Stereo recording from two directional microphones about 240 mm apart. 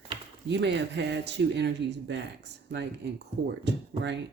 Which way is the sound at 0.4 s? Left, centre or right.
Right.